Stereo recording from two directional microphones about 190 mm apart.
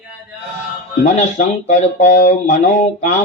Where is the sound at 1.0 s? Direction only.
40° left (ahead or behind).